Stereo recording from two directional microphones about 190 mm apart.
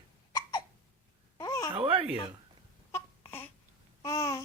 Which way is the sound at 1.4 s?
20° left (ahead or behind).